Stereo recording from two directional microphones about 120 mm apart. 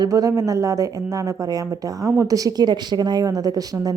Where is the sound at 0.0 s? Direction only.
30° right (ahead or behind).